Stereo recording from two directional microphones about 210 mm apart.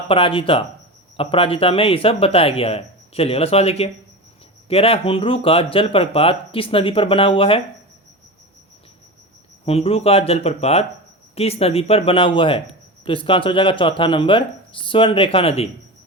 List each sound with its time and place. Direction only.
0.1 s speech: 25° left (ahead or behind)
9.6 s speech: 25° left (ahead or behind)